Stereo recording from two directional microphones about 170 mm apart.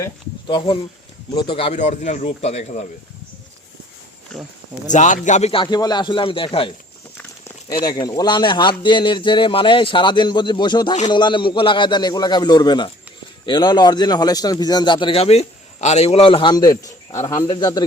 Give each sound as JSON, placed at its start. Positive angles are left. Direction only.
{"t": 0.4, "sound": "a man's voice", "side_deg": 30}
{"t": 4.9, "sound": "a man's voice", "side_deg": 45}
{"t": 7.2, "sound": "a sound", "side_deg": 15}
{"t": 7.8, "sound": "a man's voice", "side_deg": 25}